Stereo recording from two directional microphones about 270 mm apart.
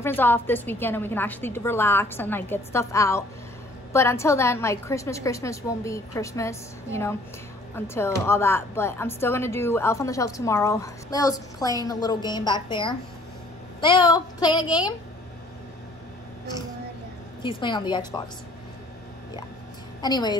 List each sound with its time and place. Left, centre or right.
0.0 s speech: centre
17.4 s speech: centre
20.0 s speech: centre